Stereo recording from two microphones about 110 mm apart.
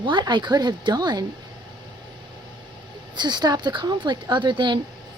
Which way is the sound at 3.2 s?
40° right (ahead or behind).